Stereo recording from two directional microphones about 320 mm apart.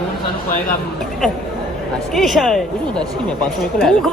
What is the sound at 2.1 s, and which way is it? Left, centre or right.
Speech, centre.